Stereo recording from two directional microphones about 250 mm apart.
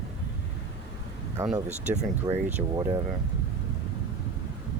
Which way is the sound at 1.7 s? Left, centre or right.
Right.